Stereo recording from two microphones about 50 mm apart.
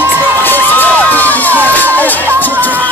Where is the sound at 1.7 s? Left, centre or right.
Left.